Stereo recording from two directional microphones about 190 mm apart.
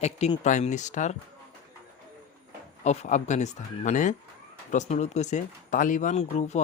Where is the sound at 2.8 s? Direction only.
35° left (ahead or behind).